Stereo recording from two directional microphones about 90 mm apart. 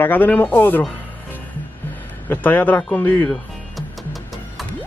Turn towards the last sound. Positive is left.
turn(degrees=0)  # may be behind; listen again after turning